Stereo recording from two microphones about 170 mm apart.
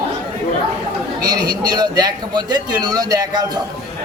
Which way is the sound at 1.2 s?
25° right (ahead or behind).